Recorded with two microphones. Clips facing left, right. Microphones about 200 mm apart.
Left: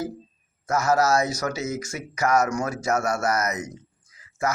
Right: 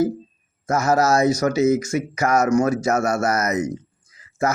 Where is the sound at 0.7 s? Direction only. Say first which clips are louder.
Right 3 dB; 20° right (ahead or behind).